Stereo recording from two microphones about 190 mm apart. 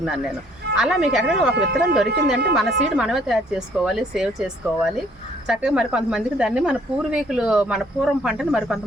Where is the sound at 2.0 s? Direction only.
60° right (ahead or behind).